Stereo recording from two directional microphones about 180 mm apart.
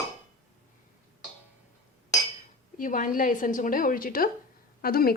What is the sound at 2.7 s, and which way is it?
A woman's voice, 45° left (ahead or behind).